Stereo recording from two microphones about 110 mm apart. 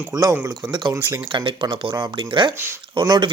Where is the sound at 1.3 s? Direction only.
45° right (ahead or behind).